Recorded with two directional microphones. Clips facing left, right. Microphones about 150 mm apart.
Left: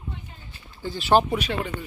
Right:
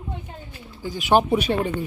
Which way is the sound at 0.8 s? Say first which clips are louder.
Right 1 dB; 15° right (ahead or behind).